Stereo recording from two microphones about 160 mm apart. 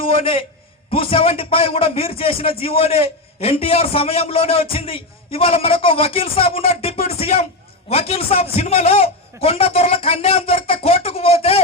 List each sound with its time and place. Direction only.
0.1 s a man's voice: 35° left (ahead or behind)